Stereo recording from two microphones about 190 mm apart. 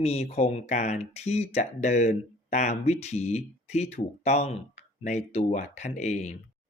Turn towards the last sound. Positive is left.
turn(degrees=35)  # may be behind; listen again after turning